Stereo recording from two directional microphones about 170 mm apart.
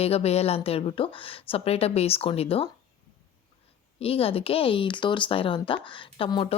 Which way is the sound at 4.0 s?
35° left (ahead or behind).